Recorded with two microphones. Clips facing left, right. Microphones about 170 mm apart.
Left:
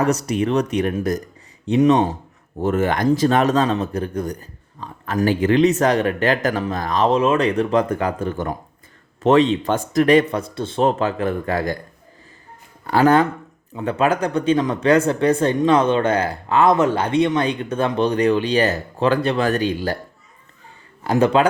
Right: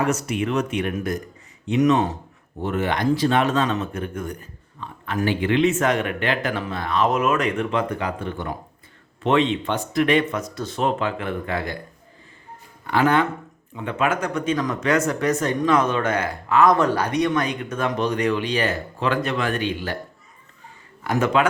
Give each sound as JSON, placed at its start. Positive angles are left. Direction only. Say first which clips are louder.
{"t": 0.0, "sound": "speech", "louder": "left 4 dB", "side_deg": 35}
{"t": 2.6, "sound": "speech", "louder": "left 4 dB", "side_deg": 45}
{"t": 12.9, "sound": "speech", "louder": "left 4 dB", "side_deg": 40}
{"t": 21.0, "sound": "speech", "louder": "left 4 dB", "side_deg": 30}